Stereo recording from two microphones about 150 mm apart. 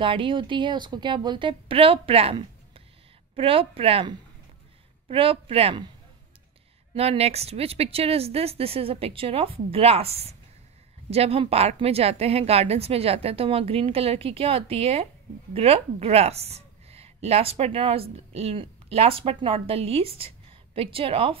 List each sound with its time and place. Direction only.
0.0 s a woman's voice: 35° right (ahead or behind)
7.0 s a woman's voice: 45° right (ahead or behind)